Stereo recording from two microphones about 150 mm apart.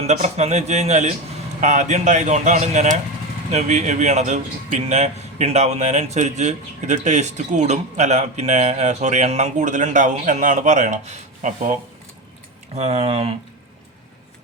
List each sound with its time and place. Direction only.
0.0 s a man's voice: 45° right (ahead or behind)
12.7 s a man's voice: 45° right (ahead or behind)